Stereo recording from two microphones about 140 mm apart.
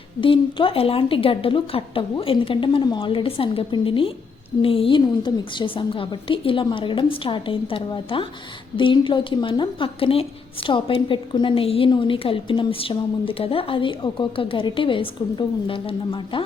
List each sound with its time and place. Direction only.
0.2 s speech: 35° left (ahead or behind)